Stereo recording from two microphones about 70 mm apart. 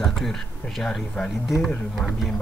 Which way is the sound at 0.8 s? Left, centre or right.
Centre.